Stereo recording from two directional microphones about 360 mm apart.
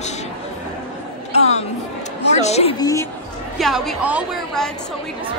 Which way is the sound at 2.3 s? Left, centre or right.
Centre.